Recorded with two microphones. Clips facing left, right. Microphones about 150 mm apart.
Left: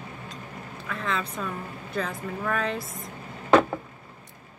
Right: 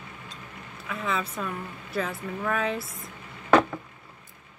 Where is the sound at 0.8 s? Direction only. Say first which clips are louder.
Right 1 dB; 5° right (ahead or behind).